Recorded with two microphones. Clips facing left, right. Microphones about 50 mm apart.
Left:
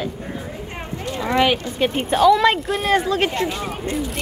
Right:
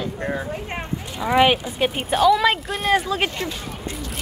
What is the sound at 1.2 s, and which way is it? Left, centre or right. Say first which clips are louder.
Speech: right 1 dB; centre.